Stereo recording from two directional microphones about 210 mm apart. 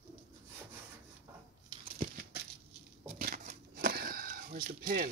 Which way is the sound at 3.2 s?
40° right (ahead or behind).